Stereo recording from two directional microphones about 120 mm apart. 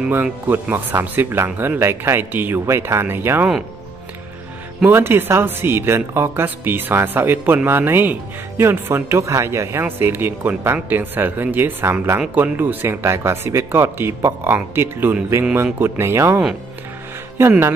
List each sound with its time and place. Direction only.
0.1 s speech: 15° right (ahead or behind)
4.8 s speech: 20° right (ahead or behind)
17.4 s speech: 20° right (ahead or behind)